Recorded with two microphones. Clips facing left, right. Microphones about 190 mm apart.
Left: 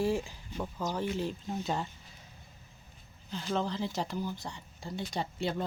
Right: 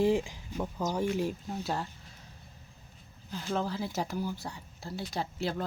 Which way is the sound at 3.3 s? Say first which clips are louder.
Even; 5° right (ahead or behind).